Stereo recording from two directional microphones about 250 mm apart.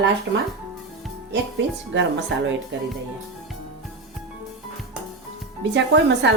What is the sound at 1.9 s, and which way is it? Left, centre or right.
Speech, right.